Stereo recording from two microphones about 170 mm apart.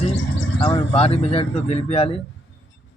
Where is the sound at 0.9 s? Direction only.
35° left (ahead or behind).